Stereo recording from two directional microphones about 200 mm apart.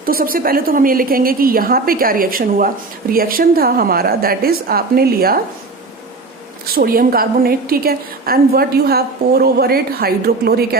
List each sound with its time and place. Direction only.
0.0 s a woman's voice: 45° right (ahead or behind)
6.7 s a woman's voice: 50° right (ahead or behind)